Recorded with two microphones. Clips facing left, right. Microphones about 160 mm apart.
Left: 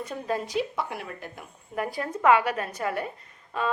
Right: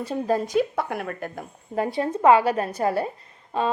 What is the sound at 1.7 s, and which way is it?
A woman's voice, 25° right (ahead or behind).